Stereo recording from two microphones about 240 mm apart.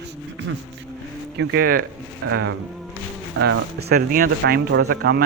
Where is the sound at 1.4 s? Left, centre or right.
Right.